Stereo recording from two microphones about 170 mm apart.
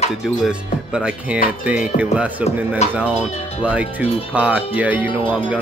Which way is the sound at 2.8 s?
40° left (ahead or behind).